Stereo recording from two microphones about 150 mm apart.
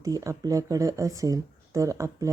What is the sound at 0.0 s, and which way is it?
Speech, 25° right (ahead or behind).